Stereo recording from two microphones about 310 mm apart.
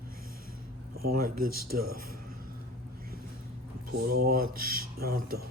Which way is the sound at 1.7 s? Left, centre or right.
Right.